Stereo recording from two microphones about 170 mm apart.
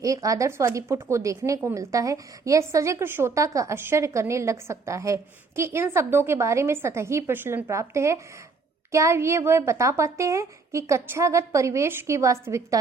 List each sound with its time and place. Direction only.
0.0 s a woman's voice: 20° right (ahead or behind)